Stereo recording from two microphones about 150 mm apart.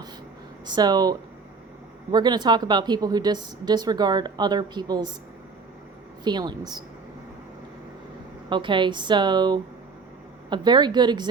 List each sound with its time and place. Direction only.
0.6 s a woman's voice: 30° right (ahead or behind)
6.2 s a woman's voice: 30° right (ahead or behind)
8.4 s a woman's voice: 30° right (ahead or behind)